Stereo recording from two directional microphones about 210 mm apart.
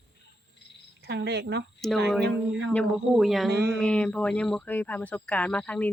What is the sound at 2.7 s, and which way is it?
Speech, centre (ahead or behind).